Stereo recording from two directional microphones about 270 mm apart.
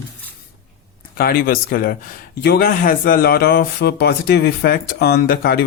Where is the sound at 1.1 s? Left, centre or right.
Left.